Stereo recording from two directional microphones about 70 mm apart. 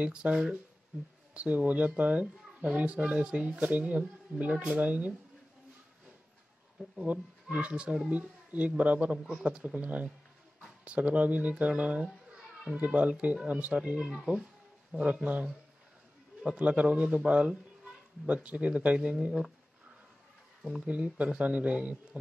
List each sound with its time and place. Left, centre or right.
0.0 s a child's voice: centre
7.5 s a child's voice: centre
20.8 s speech: centre